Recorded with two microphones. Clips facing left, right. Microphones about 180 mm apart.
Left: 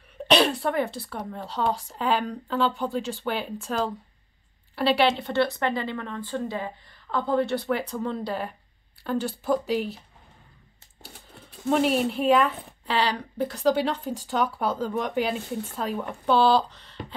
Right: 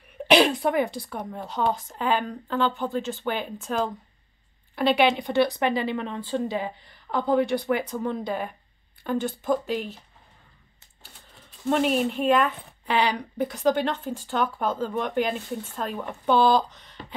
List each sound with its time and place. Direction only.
0.3 s cough: 10° right (ahead or behind)
1.1 s a woman's voice: 10° right (ahead or behind)
2.0 s speech: 5° left (ahead or behind)
4.9 s a woman's voice: 10° right (ahead or behind)
7.9 s speech: 5° right (ahead or behind)
11.6 s speech: centre (ahead or behind)
12.8 s a woman's voice: 10° right (ahead or behind)
13.7 s speech: 5° left (ahead or behind)